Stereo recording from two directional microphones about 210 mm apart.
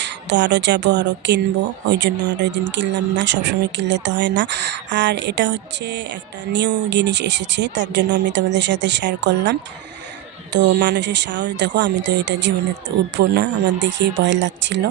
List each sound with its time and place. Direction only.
0.0 s speech: 55° right (ahead or behind)